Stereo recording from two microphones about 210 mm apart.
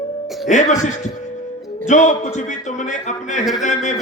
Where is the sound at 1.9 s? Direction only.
35° left (ahead or behind).